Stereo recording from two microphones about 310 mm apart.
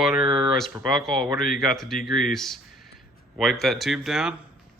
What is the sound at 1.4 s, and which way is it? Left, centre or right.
Speech, left.